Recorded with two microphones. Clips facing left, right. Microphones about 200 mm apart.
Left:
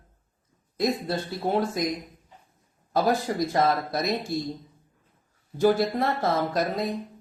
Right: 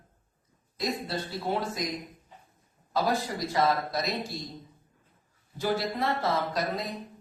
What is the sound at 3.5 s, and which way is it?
Speech, 50° left (ahead or behind).